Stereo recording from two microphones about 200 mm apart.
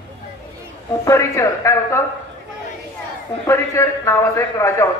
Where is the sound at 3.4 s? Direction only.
15° left (ahead or behind).